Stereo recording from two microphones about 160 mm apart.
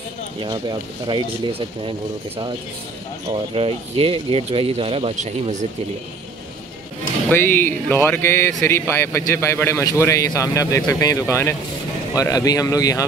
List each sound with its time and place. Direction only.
0.4 s speech: 30° right (ahead or behind); by 5.7 s 50° right (ahead or behind)
7.2 s a man's voice: 15° left (ahead or behind)